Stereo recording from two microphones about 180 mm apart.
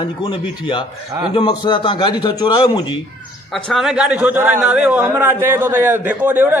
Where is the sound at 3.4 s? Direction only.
5° left (ahead or behind).